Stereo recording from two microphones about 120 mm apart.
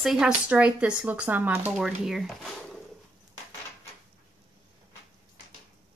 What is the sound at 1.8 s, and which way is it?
Speech, 5° right (ahead or behind).